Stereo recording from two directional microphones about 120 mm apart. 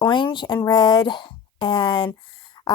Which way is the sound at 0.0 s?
40° left (ahead or behind).